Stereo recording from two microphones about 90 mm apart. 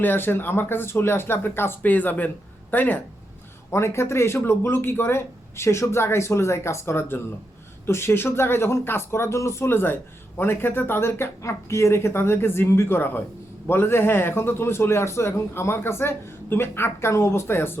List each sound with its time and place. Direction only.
0.0 s speech: 25° left (ahead or behind)